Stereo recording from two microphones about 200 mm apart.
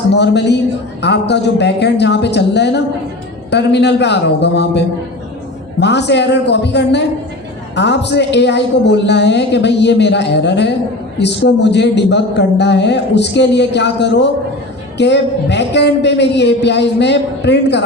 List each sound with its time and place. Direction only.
0.1 s a man's voice: 60° left (ahead or behind)
5.8 s a man's voice: 60° left (ahead or behind)